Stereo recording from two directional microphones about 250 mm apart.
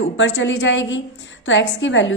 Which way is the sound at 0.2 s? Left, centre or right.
Left.